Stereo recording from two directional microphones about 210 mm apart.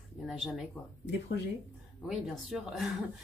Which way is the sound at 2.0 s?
Centre (ahead or behind).